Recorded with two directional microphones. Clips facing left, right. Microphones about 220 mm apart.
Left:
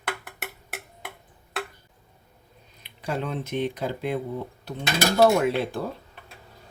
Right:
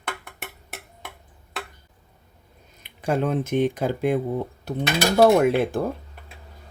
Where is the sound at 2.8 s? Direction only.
50° right (ahead or behind).